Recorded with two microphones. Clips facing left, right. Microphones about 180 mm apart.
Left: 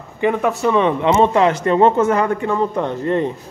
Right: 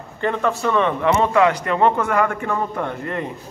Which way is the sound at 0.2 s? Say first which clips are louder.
Left 4 dB; 10° left (ahead or behind).